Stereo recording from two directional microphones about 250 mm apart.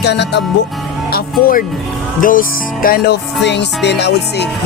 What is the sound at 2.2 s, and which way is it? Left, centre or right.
Music, left.